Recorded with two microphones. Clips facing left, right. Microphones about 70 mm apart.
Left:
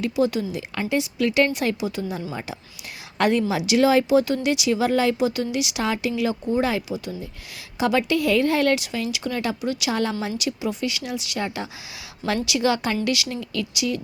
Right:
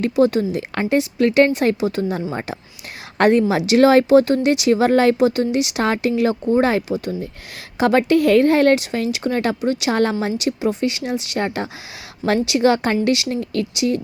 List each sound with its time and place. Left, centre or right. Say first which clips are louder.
0.0 s a woman's voice: right 6 dB; right
5.3 s speech: right 6 dB; right